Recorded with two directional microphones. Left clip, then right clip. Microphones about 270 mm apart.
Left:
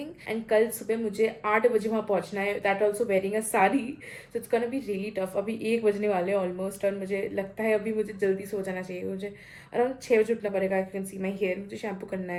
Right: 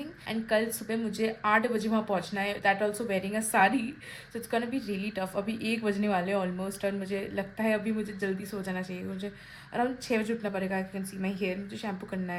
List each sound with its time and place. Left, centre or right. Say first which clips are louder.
0.3 s a woman's voice: left 4 dB; centre